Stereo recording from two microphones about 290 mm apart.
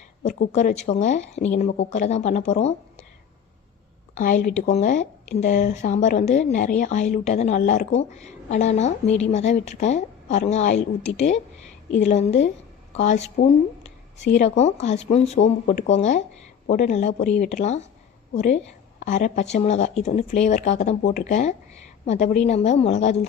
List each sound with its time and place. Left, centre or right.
0.2 s a woman's voice: left
4.1 s a woman's voice: left